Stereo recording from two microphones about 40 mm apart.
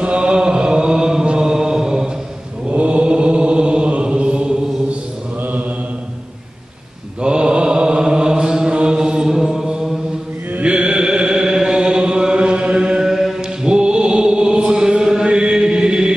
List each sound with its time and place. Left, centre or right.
0.0 s mantra: right
2.7 s mantra: right
7.2 s mantra: right
8.7 s chant: centre
10.6 s chant: right
13.0 s chant: centre
13.4 s chant: right